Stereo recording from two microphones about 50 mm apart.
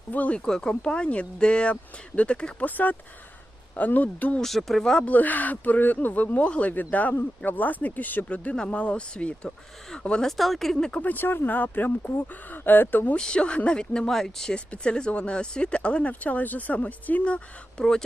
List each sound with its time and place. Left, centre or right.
0.1 s speech: left
0.3 s speech: centre
2.6 s speech: left
4.4 s speech: centre
5.0 s speech: left
8.5 s speech: left
10.2 s speech: centre
11.0 s speech: left
13.1 s speech: centre
14.5 s speech: left
17.7 s speech: centre